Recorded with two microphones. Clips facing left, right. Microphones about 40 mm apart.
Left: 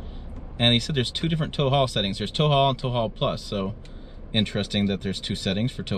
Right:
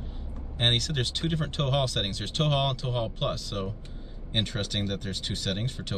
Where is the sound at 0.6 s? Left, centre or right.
Centre.